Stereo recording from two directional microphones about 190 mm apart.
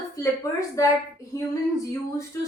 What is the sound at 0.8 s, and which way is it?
A woman's voice, 15° left (ahead or behind).